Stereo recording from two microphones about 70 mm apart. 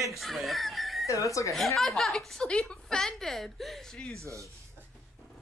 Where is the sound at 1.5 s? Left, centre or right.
Centre.